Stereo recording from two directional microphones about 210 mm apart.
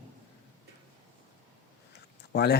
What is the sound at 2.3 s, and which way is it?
Speech, 50° left (ahead or behind).